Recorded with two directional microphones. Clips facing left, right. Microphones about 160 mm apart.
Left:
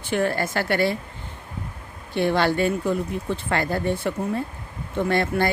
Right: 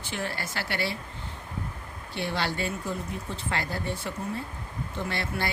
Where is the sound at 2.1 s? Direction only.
55° left (ahead or behind).